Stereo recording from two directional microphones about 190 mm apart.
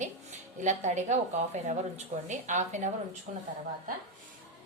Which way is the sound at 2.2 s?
40° right (ahead or behind).